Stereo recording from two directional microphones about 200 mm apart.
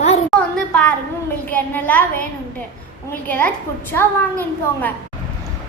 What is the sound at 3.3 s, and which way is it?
A woman's voice, 10° left (ahead or behind).